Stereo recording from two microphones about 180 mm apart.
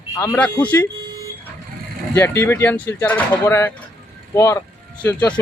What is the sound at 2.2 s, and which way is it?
Speech, 15° left (ahead or behind).